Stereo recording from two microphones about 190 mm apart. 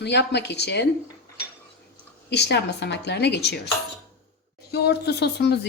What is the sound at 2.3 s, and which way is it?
Speech, 60° left (ahead or behind).